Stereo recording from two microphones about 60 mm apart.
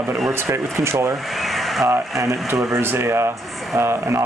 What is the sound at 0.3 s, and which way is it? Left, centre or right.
Speech, right.